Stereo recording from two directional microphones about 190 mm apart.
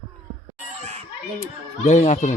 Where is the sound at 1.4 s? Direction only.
40° left (ahead or behind).